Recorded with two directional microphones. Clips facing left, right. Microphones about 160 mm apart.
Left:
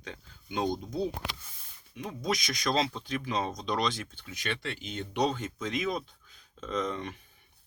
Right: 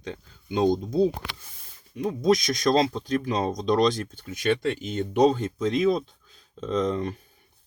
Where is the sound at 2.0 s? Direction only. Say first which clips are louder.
Right 11 dB; 35° right (ahead or behind).